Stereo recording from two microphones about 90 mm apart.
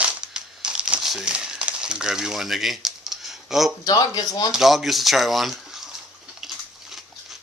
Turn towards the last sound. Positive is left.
turn(degrees=0)  # may be behind; listen again after turning